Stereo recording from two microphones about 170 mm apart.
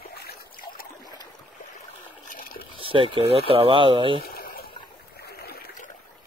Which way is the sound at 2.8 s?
30° right (ahead or behind).